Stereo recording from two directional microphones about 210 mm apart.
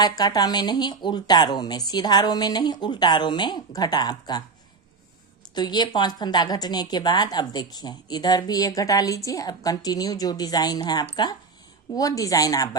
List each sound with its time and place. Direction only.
0.0 s a woman's voice: 20° left (ahead or behind)
5.5 s a woman's voice: 20° left (ahead or behind)